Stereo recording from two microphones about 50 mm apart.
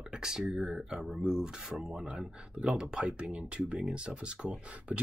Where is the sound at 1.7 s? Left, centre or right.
Centre.